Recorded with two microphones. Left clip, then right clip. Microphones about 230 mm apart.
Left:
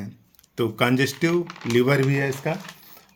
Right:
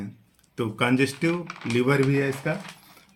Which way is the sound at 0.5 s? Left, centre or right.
Left.